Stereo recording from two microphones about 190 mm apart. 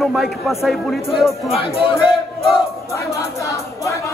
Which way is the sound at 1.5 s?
30° left (ahead or behind).